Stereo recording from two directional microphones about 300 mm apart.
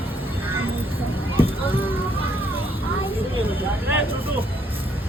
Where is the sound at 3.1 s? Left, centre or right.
Centre.